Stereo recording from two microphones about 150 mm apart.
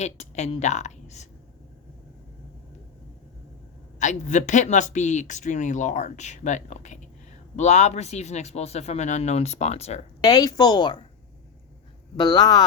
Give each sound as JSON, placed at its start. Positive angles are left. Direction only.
{"t": 0.0, "sound": "a woman's voice", "side_deg": 50}
{"t": 4.0, "sound": "speech", "side_deg": 55}
{"t": 10.2, "sound": "a woman's voice", "side_deg": 25}
{"t": 12.1, "sound": "a woman's voice", "side_deg": 30}